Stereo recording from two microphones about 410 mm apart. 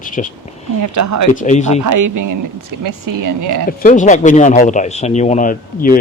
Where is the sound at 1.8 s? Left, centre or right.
Right.